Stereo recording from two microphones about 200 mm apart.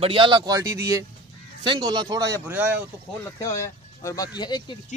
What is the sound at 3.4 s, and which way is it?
Speech, 15° left (ahead or behind).